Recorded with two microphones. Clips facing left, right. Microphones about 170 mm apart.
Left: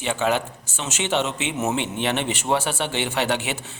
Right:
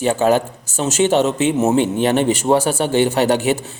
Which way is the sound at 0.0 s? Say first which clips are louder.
Right 8 dB; 40° right (ahead or behind).